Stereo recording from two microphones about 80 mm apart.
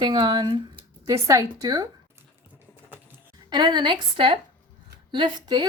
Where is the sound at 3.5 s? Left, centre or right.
Right.